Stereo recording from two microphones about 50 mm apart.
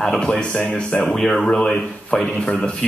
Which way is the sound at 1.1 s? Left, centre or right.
Centre.